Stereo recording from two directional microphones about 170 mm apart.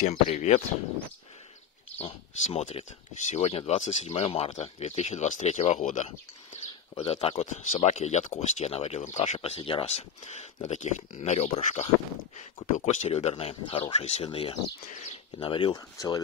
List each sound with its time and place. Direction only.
0.3 s speech: 40° left (ahead or behind)
2.0 s speech: 35° left (ahead or behind)
7.0 s speech: 35° left (ahead or behind)